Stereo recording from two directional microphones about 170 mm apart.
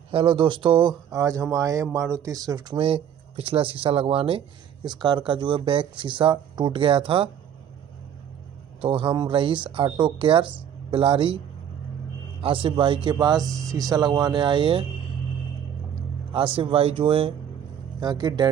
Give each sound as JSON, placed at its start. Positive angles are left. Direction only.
{"t": 0.1, "sound": "speech", "side_deg": -30}
{"t": 8.8, "sound": "speech", "side_deg": -30}
{"t": 16.3, "sound": "speech", "side_deg": -30}